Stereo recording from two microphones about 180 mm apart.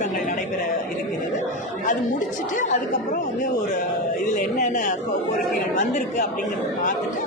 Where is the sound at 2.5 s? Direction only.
45° left (ahead or behind).